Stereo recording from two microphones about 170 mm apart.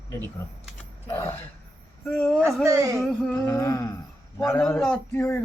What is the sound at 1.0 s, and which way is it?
Speech, 15° left (ahead or behind).